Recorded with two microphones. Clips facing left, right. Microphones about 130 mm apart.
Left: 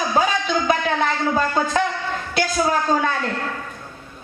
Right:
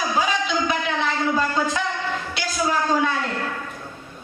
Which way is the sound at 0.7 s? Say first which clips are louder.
Left 5 dB; 50° left (ahead or behind).